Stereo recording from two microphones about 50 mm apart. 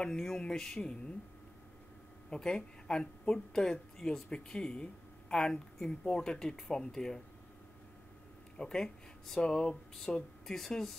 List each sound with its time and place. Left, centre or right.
0.0 s speech: centre
2.3 s speech: centre
8.5 s speech: centre